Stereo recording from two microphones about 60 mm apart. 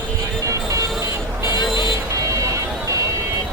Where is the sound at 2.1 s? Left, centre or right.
Right.